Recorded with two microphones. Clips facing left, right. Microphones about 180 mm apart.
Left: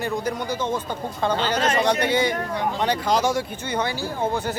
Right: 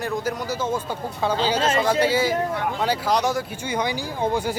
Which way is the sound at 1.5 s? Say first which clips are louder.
Even; 25° right (ahead or behind).